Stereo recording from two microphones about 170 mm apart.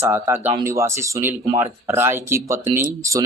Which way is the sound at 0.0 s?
15° right (ahead or behind).